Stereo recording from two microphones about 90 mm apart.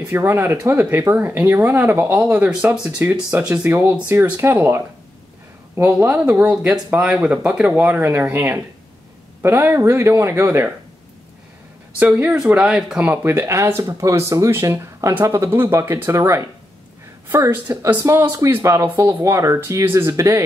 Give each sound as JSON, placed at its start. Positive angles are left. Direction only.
{"t": 0.1, "sound": "speech", "side_deg": -25}
{"t": 12.0, "sound": "speech", "side_deg": -15}
{"t": 13.0, "sound": "speech", "side_deg": -25}